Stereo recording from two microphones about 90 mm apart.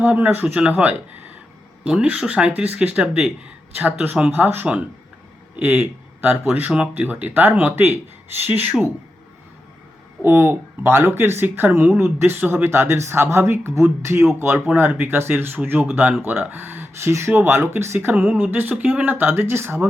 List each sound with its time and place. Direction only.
0.0 s speech: 15° right (ahead or behind)
10.2 s speech: 25° right (ahead or behind)
14.5 s speech: 10° right (ahead or behind)
14.8 s speech: 25° right (ahead or behind)